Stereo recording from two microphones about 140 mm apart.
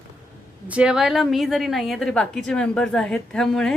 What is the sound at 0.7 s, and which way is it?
A woman's voice, 5° right (ahead or behind).